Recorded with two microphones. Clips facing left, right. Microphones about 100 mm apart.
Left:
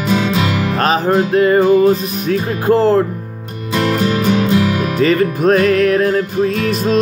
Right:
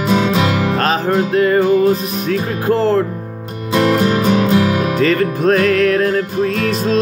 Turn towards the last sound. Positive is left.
turn(degrees=15)  # may be behind; listen again after turning